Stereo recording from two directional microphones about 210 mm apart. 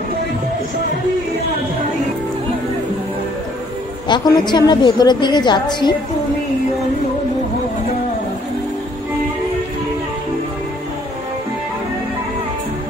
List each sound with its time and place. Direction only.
4.1 s a woman's voice: 20° left (ahead or behind)